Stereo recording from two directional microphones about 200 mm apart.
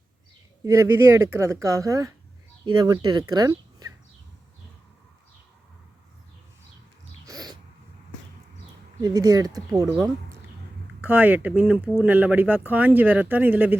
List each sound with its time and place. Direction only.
0.6 s speech: 15° right (ahead or behind)
7.3 s a sound: 20° right (ahead or behind)
9.0 s speech: 20° right (ahead or behind)